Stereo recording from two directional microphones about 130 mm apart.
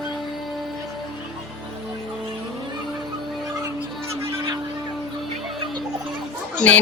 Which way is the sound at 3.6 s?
20° right (ahead or behind).